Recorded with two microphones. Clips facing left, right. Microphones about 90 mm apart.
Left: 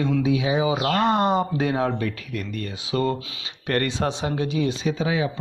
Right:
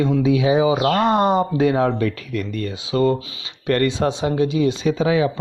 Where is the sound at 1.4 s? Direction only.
35° right (ahead or behind).